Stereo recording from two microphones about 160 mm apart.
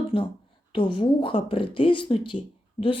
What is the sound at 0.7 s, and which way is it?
Speech, 30° left (ahead or behind).